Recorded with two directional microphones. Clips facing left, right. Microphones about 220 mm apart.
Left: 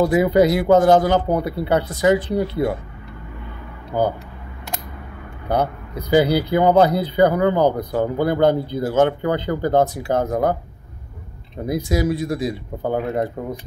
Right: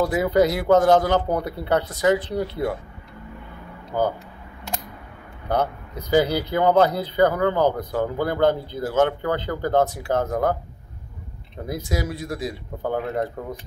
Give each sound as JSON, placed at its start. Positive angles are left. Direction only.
{"t": 0.0, "sound": "speech", "side_deg": 10}
{"t": 3.9, "sound": "speech", "side_deg": 15}
{"t": 5.5, "sound": "speech", "side_deg": 10}
{"t": 11.6, "sound": "speech", "side_deg": 15}